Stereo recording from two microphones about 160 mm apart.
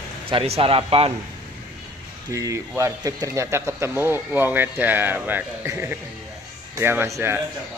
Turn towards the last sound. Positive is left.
turn(degrees=-15)  # may be behind; listen again after turning